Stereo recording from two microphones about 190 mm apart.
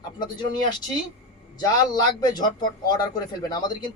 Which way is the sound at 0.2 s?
25° left (ahead or behind).